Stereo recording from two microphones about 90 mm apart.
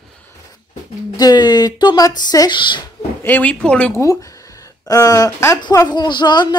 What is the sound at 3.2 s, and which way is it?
Speech, 20° left (ahead or behind).